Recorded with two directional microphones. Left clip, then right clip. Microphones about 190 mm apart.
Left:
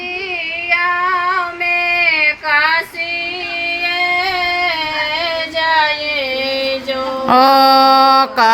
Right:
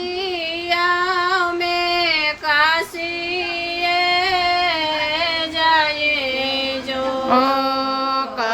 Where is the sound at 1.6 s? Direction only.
90° right.